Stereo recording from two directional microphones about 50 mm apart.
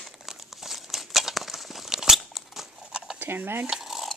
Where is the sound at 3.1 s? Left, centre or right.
Right.